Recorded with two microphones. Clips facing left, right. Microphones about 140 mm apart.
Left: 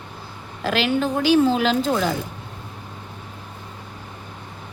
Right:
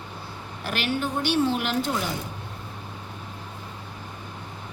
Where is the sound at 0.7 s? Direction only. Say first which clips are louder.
Left 6 dB; 90° left.